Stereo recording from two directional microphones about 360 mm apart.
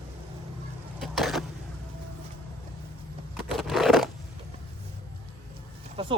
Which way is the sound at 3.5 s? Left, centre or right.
Centre.